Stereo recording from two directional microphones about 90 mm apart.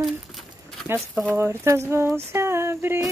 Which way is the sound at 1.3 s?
30° right (ahead or behind).